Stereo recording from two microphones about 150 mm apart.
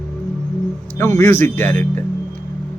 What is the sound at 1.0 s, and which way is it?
A man's voice, 15° left (ahead or behind).